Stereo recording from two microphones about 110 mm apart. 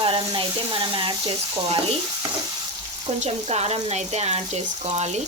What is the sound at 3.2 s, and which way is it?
Speech, 80° right.